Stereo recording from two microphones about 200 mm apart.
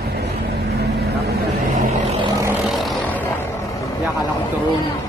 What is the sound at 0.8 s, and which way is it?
Vehicle, 55° right (ahead or behind).